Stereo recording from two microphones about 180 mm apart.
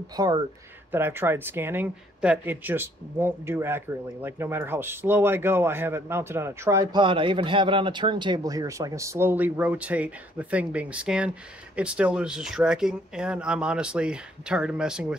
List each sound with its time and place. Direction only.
0.1 s speech: 20° right (ahead or behind); by 15.1 s 5° right (ahead or behind)